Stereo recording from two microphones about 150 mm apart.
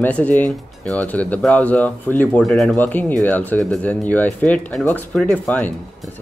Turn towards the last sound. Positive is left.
turn(degrees=5)  # may be behind; listen again after turning